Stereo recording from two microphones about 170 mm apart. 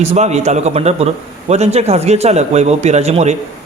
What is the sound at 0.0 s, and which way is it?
A man's voice, 40° right (ahead or behind).